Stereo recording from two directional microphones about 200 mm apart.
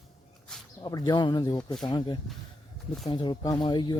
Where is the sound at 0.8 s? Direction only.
20° left (ahead or behind).